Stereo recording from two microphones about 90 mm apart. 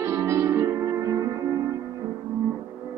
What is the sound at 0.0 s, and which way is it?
Music, 35° right (ahead or behind).